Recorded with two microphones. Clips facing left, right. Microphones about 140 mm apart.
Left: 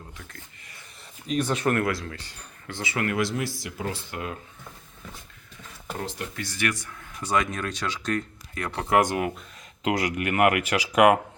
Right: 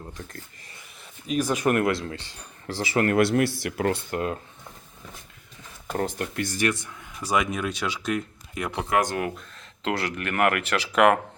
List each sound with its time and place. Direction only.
1.3 s speech: 10° right (ahead or behind); by 3.2 s 35° right (ahead or behind)
3.2 s speech: 60° right (ahead or behind)
6.0 s speech: 50° right (ahead or behind)
6.7 s speech: 20° right (ahead or behind)
7.2 s speech: 10° right (ahead or behind)
8.9 s speech: 25° left (ahead or behind)